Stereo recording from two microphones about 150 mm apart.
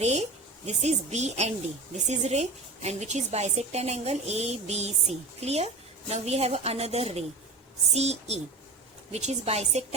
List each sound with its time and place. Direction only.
0.0 s speech: 45° right (ahead or behind)